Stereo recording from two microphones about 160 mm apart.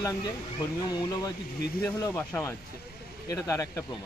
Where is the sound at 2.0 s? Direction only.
10° left (ahead or behind).